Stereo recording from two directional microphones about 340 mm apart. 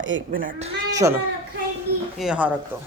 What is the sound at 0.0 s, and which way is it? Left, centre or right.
Speech, right.